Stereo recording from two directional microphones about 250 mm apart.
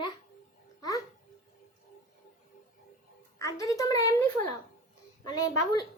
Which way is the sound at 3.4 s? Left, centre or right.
Centre.